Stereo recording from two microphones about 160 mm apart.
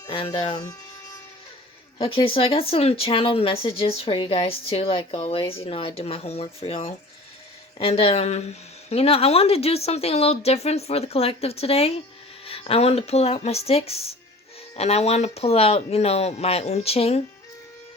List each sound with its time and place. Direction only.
0.1 s speech: 30° left (ahead or behind)
2.0 s speech: 35° left (ahead or behind)